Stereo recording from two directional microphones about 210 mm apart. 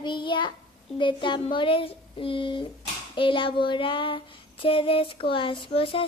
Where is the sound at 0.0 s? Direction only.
20° left (ahead or behind).